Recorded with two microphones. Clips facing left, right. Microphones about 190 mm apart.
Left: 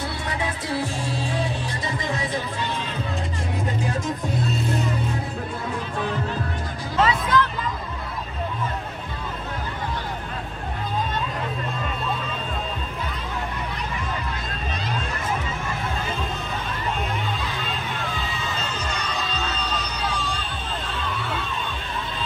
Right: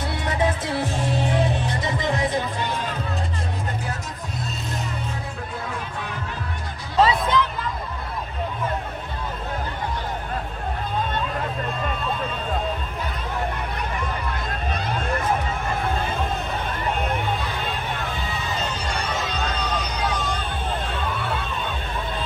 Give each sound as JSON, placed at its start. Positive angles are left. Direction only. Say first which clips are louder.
{"t": 0.3, "sound": "music", "louder": "right 6 dB", "side_deg": -20}
{"t": 7.0, "sound": "music", "louder": "right 3 dB", "side_deg": -35}
{"t": 14.7, "sound": "a sound", "louder": "right 3 dB", "side_deg": -55}
{"t": 19.1, "sound": "music", "louder": "right 2 dB", "side_deg": -55}